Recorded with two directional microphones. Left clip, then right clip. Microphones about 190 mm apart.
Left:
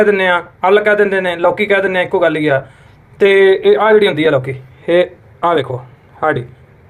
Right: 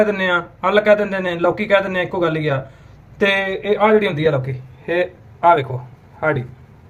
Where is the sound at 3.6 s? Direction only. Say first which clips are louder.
Left 6 dB; 35° left (ahead or behind); by 6.4 s 10° left (ahead or behind).